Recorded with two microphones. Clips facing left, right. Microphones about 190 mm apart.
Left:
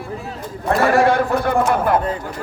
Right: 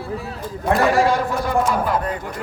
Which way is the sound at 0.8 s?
60° left (ahead or behind).